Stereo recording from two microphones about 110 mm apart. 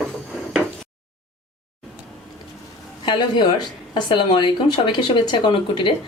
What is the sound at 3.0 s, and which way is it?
Speech, 45° left (ahead or behind).